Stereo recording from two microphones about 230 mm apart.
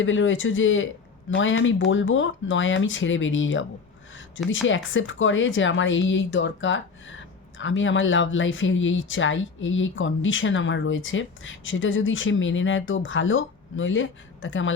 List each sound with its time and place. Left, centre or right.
0.0 s speech: left